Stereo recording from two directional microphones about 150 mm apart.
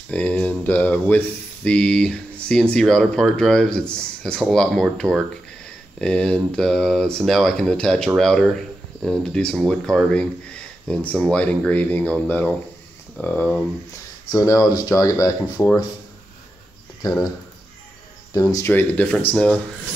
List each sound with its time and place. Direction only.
0.1 s speech: 10° left (ahead or behind)
14.3 s speech: 20° left (ahead or behind)
18.5 s speech: 15° left (ahead or behind)